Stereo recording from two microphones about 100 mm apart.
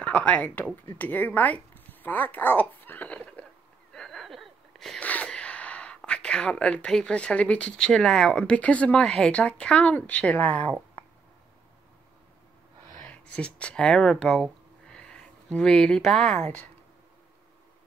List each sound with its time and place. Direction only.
0.0 s speech: 15° left (ahead or behind)
3.9 s a sound: 5° left (ahead or behind)
6.0 s speech: 10° left (ahead or behind)
13.0 s speech: 10° left (ahead or behind)